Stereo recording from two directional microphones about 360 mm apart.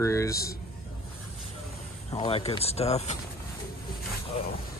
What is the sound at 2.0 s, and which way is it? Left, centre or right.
Speech, centre.